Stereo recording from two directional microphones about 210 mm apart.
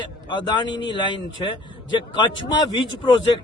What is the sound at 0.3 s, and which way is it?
Speech, 20° left (ahead or behind).